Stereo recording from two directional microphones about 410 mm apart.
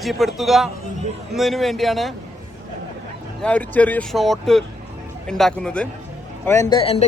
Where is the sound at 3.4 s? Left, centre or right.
Centre.